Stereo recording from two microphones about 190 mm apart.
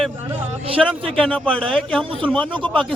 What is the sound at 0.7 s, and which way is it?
Speech, 5° right (ahead or behind).